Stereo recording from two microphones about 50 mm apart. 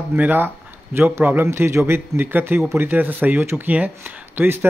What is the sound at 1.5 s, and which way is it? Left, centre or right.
Speech, right.